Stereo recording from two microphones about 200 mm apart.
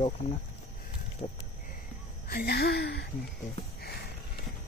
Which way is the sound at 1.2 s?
40° left (ahead or behind).